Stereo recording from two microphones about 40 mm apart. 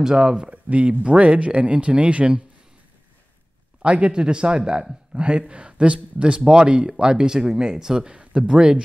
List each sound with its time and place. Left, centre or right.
0.0 s speech: right
0.7 s speech: right
3.8 s speech: right
6.4 s speech: right
8.1 s speech: right